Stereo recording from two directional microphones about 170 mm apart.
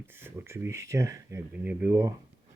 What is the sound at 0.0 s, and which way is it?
Speech, 15° right (ahead or behind).